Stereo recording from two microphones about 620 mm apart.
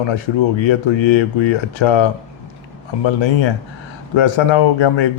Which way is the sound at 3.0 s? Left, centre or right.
Left.